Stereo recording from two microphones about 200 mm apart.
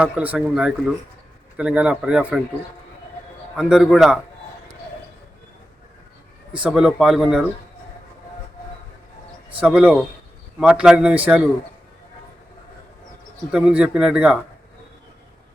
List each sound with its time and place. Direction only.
0.0 s speech: 5° right (ahead or behind)
3.5 s speech: 5° right (ahead or behind)
6.5 s speech: 5° right (ahead or behind)
9.6 s speech: 5° right (ahead or behind)
13.5 s speech: 5° right (ahead or behind)